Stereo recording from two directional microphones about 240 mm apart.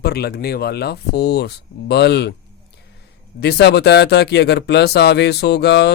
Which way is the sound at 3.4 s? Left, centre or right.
Left.